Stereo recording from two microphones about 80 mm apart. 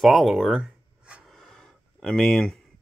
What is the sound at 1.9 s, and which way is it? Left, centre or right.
Speech, centre.